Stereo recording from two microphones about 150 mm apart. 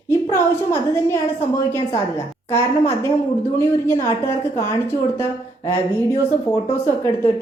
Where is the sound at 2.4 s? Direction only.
15° left (ahead or behind).